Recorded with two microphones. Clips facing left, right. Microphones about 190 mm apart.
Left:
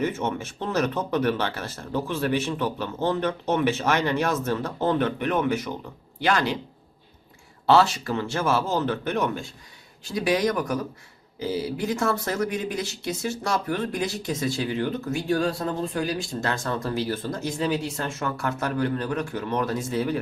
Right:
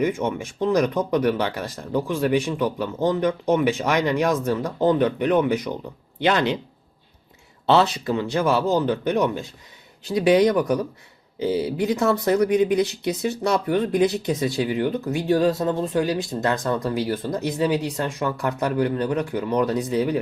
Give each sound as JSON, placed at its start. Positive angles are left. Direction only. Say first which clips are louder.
{"t": 0.0, "sound": "speech", "louder": "right 3 dB", "side_deg": -10}
{"t": 7.7, "sound": "speech", "louder": "right 1 dB", "side_deg": -20}